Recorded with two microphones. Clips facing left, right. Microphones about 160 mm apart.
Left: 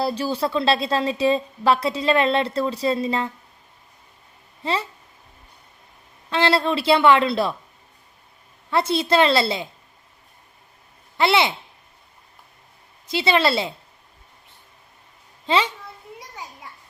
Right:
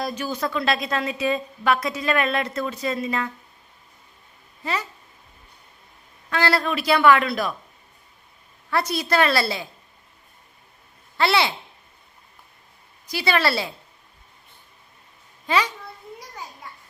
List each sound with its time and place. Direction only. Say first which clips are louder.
0.0 s a woman's voice: left 4 dB; 30° left (ahead or behind)
4.6 s a woman's voice: left 3 dB; 30° left (ahead or behind)
6.3 s a woman's voice: left 3 dB; 25° left (ahead or behind)
8.7 s a woman's voice: left 3 dB; 25° left (ahead or behind)
11.2 s a woman's voice: left 2 dB; 20° left (ahead or behind)
13.1 s a woman's voice: left 3 dB; 25° left (ahead or behind)
15.4 s a child's voice: left 2 dB; 25° left (ahead or behind)